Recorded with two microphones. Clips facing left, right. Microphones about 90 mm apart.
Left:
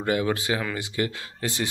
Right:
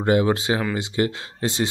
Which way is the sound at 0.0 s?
25° right (ahead or behind).